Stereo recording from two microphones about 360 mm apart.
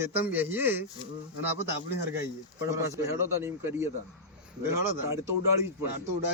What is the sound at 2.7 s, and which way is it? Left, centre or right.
Speech, centre.